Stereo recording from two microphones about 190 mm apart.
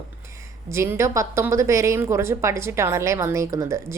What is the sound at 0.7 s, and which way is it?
A woman's voice, 15° right (ahead or behind).